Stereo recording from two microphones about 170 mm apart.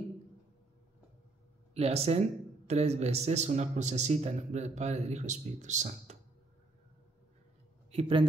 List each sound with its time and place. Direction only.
1.7 s speech: 40° right (ahead or behind)
7.9 s speech: 35° right (ahead or behind)